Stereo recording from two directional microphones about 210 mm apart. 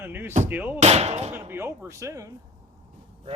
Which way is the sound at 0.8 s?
30° right (ahead or behind).